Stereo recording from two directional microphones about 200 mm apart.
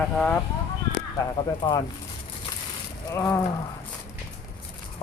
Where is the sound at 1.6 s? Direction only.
20° left (ahead or behind).